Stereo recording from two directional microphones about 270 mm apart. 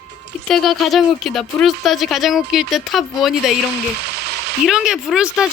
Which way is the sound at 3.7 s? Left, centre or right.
Right.